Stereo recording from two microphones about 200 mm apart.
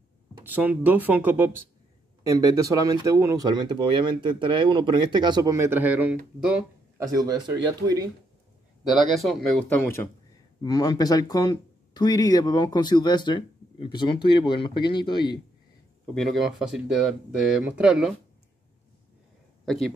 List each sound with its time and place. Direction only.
0.3 s speech: 10° right (ahead or behind)
8.8 s speech: centre (ahead or behind); by 15.4 s 20° left (ahead or behind)
16.2 s speech: centre (ahead or behind)
19.6 s speech: centre (ahead or behind)